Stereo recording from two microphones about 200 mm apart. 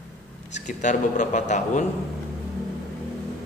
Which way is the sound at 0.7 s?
35° left (ahead or behind).